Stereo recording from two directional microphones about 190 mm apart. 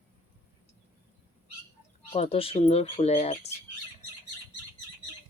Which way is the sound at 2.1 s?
30° left (ahead or behind).